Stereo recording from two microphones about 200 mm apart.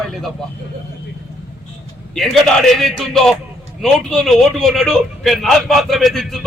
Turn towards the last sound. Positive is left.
turn(degrees=0)  # may be behind; listen again after turning